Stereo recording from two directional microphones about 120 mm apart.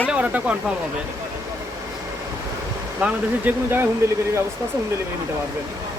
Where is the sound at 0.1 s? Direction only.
10° right (ahead or behind).